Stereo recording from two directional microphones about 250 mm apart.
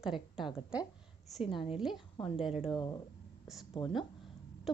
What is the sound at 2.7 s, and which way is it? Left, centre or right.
Speech, centre.